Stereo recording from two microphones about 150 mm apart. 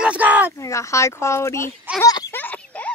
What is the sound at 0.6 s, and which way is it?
Speech, 20° left (ahead or behind).